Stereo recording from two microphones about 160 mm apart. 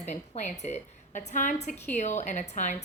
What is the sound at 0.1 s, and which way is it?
A woman's voice, 50° left (ahead or behind).